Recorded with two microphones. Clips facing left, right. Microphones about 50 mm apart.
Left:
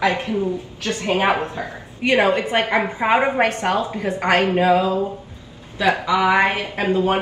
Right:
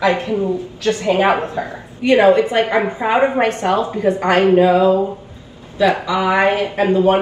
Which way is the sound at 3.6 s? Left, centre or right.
Left.